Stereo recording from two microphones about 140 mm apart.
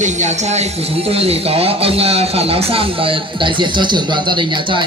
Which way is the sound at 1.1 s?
45° right (ahead or behind).